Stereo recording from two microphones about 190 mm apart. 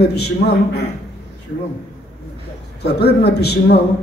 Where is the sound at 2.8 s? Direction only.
60° left (ahead or behind).